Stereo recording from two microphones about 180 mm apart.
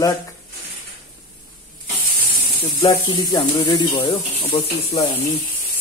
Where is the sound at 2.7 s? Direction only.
30° left (ahead or behind).